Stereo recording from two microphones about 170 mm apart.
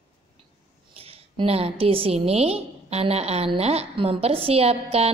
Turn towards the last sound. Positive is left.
turn(degrees=-35)  # may be behind; listen again after turning